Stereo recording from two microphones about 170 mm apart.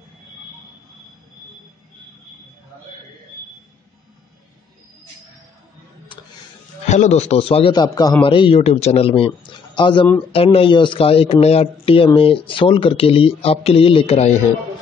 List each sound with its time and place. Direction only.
6.9 s speech: 40° left (ahead or behind)